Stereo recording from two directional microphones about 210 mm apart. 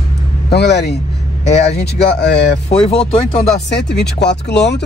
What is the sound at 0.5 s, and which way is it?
Speech, 50° left (ahead or behind).